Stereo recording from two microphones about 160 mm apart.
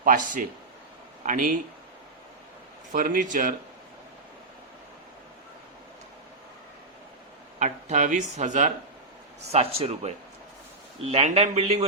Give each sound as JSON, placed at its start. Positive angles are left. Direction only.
{"t": 0.0, "sound": "speech", "side_deg": -55}
{"t": 2.9, "sound": "speech", "side_deg": -55}
{"t": 7.6, "sound": "speech", "side_deg": -50}
{"t": 9.5, "sound": "a man's voice", "side_deg": -40}